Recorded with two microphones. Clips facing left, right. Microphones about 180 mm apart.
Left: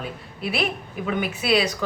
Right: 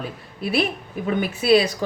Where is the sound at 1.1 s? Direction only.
35° right (ahead or behind).